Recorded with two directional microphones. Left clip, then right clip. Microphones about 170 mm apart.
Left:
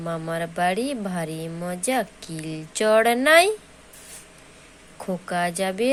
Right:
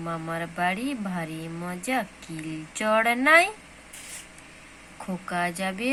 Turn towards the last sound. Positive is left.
turn(degrees=35)  # may be behind; listen again after turning